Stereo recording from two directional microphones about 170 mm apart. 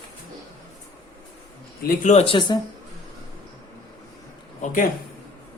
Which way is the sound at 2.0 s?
40° left (ahead or behind).